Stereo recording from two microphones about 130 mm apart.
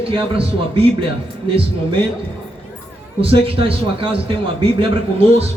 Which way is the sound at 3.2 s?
45° right (ahead or behind).